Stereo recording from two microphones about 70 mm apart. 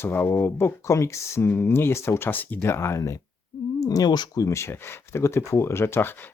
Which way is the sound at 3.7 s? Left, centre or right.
Left.